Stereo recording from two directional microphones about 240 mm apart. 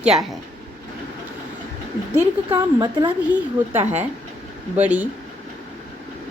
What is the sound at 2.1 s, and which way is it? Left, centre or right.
Speech, centre.